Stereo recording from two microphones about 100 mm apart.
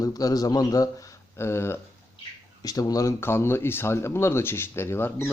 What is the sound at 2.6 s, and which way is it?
Speech, 40° left (ahead or behind).